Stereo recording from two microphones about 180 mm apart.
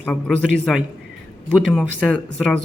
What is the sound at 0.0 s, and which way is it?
Speech, 5° left (ahead or behind).